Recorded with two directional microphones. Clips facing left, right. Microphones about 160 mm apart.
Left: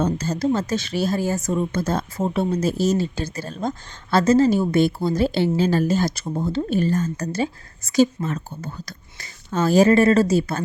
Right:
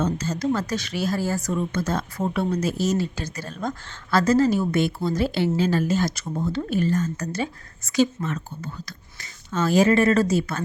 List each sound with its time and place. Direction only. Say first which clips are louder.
0.0 s speech: left 3 dB; 35° left (ahead or behind)